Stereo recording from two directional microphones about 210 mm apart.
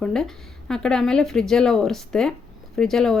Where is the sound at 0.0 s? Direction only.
5° left (ahead or behind).